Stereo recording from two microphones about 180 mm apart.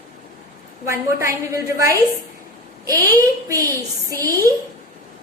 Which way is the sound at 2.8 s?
20° right (ahead or behind).